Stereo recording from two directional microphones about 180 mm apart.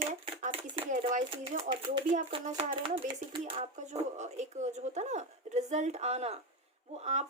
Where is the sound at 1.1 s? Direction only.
35° right (ahead or behind).